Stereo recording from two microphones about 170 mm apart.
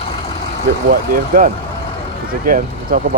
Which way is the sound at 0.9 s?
55° right (ahead or behind).